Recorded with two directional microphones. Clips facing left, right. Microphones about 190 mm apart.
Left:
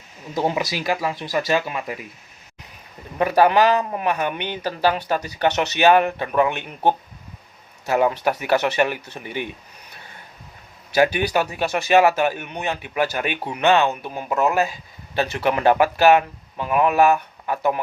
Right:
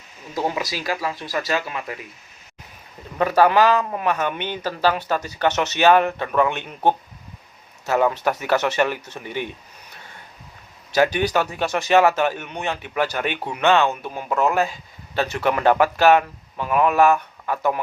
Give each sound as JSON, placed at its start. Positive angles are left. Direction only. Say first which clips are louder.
{"t": 0.7, "sound": "speech", "louder": "left 2 dB", "side_deg": 20}
{"t": 3.2, "sound": "a man's voice", "louder": "even", "side_deg": 20}
{"t": 10.9, "sound": "a man's voice", "louder": "even", "side_deg": 10}